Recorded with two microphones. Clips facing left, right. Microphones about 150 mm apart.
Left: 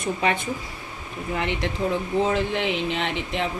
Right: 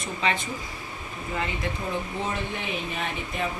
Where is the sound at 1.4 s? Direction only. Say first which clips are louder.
Left 3 dB; 80° left.